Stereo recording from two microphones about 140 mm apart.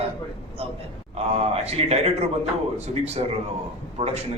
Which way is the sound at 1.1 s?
50° right (ahead or behind).